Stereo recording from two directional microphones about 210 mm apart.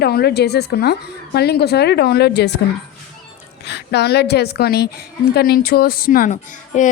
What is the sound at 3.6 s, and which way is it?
A woman's voice, 50° left (ahead or behind).